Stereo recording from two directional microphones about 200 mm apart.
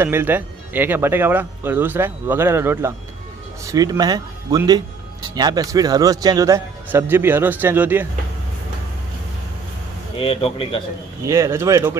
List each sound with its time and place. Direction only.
0.0 s speech: 10° right (ahead or behind)
10.1 s speech: 30° left (ahead or behind)
11.2 s speech: 15° right (ahead or behind)